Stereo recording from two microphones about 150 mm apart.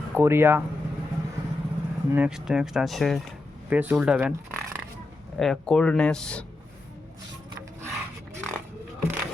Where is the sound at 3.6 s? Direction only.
10° right (ahead or behind).